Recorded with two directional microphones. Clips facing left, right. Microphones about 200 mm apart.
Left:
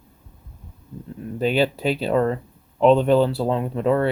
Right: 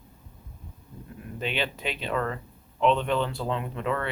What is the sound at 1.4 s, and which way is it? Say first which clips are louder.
Speech: left 10 dB; 40° left (ahead or behind).